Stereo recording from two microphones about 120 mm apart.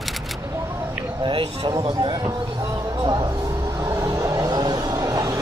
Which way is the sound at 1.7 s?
35° right (ahead or behind).